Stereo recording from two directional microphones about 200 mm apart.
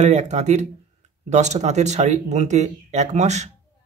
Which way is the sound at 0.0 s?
35° right (ahead or behind).